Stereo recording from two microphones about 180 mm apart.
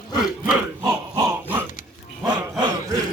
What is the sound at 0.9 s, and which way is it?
Dog, 20° right (ahead or behind).